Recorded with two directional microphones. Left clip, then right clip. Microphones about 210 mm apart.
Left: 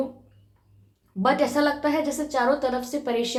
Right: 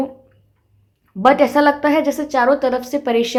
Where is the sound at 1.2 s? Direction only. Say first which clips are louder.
Right 9 dB; 45° right (ahead or behind).